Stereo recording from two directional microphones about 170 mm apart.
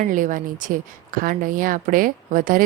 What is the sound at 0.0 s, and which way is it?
Speech, 50° right (ahead or behind).